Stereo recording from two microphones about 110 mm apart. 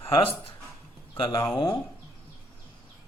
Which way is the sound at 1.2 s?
30° left (ahead or behind).